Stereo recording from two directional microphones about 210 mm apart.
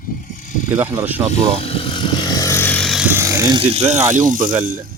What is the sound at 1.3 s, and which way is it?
Speech, 30° left (ahead or behind).